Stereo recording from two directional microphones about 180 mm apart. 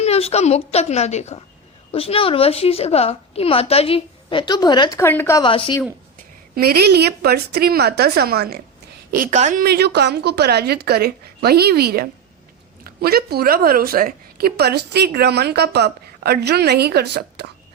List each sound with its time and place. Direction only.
0.0 s a woman's voice: 35° left (ahead or behind); by 5.4 s 15° left (ahead or behind)
5.4 s a woman's voice: 30° left (ahead or behind)
6.6 s a woman's voice: 60° right (ahead or behind)
9.1 s a woman's voice: 45° right (ahead or behind)
9.6 s a woman's voice: 65° right (ahead or behind)